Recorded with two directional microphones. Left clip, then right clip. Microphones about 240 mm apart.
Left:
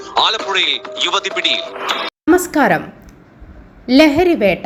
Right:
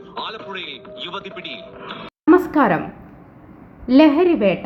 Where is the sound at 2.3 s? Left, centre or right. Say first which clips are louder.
Left 2 dB; centre.